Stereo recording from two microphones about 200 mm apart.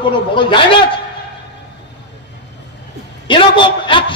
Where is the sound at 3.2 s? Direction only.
25° left (ahead or behind).